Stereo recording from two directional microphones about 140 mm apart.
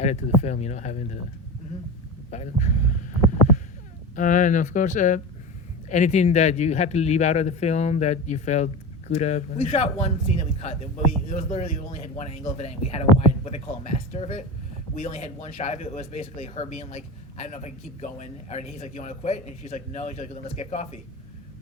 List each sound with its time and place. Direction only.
0.0 s speech: 55° left (ahead or behind)
2.3 s speech: 55° left (ahead or behind)
4.1 s speech: 65° left (ahead or behind); by 10.8 s 50° left (ahead or behind)
11.3 s speech: 60° left (ahead or behind)